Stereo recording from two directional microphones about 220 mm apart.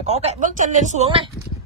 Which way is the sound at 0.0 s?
30° right (ahead or behind).